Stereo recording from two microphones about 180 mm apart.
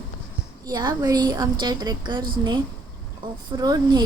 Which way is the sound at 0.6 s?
25° right (ahead or behind).